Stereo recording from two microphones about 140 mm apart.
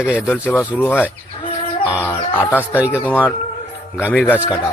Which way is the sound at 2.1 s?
15° left (ahead or behind).